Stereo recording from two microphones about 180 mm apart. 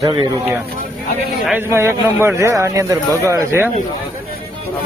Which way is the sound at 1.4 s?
10° right (ahead or behind).